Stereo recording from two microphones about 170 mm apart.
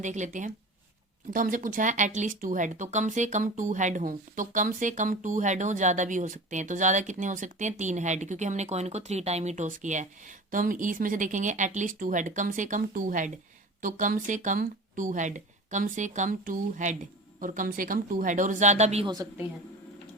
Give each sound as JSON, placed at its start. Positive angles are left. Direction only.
{"t": 0.0, "sound": "speech", "side_deg": -45}
{"t": 19.0, "sound": "a woman's voice", "side_deg": -20}